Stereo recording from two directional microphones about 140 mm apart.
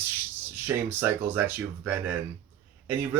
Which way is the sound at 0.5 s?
15° right (ahead or behind).